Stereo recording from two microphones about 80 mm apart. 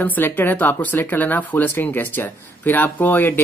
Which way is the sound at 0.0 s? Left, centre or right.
Left.